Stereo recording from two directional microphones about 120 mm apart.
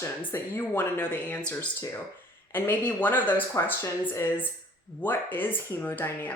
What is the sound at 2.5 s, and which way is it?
Speech, 15° left (ahead or behind).